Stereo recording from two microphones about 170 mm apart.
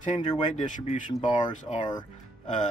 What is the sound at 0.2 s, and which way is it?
Speech, 25° left (ahead or behind).